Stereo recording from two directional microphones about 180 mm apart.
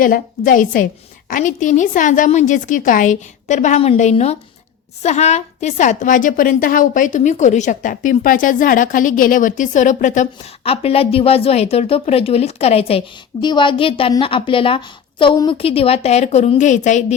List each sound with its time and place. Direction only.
0.0 s a woman's voice: 50° left (ahead or behind)